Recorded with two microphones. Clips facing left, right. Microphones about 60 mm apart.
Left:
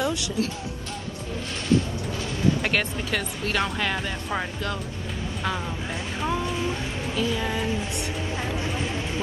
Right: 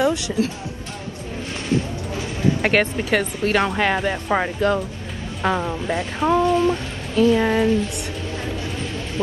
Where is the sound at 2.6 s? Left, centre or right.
Right.